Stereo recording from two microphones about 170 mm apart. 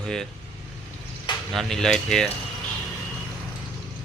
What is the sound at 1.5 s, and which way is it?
Speech, 5° left (ahead or behind).